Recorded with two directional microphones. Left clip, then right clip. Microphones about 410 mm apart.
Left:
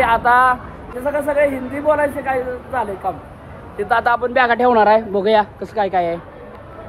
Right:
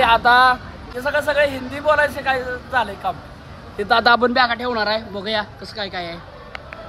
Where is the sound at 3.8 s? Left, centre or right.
Right.